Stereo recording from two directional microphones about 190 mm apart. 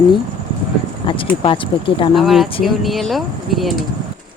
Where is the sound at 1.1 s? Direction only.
25° left (ahead or behind).